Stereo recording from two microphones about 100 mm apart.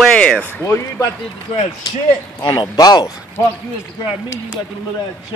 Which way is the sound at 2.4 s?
45° left (ahead or behind).